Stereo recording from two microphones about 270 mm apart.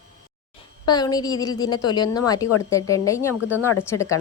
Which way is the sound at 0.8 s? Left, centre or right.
Centre.